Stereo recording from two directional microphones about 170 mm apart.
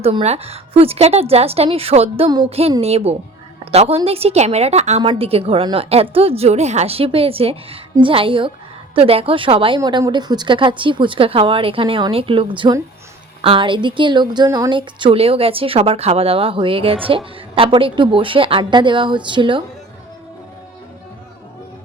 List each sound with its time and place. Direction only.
0.0 s a woman's voice: 35° right (ahead or behind)